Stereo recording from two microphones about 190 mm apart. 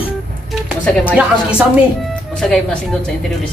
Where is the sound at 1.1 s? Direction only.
5° right (ahead or behind).